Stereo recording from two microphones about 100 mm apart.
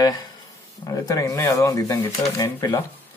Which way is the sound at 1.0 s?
35° left (ahead or behind).